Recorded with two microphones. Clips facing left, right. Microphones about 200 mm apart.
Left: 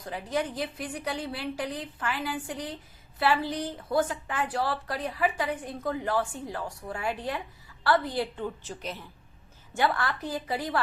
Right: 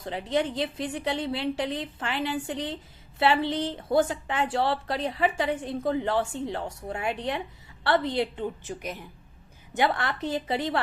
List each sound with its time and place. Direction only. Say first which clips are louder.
0.0 s a woman's voice: right 3 dB; 25° right (ahead or behind)